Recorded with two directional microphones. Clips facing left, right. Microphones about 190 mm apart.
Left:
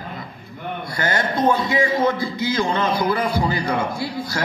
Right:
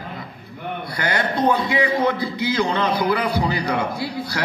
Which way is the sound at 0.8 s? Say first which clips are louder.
Left 1 dB; 45° left (ahead or behind).